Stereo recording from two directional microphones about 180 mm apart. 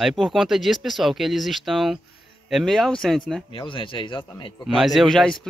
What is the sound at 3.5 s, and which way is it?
Speech, 30° left (ahead or behind).